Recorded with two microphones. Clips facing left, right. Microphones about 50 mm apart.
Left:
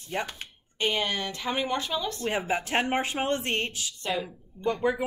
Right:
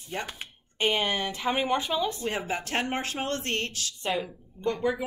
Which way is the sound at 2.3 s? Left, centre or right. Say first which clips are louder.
Left 3 dB; centre.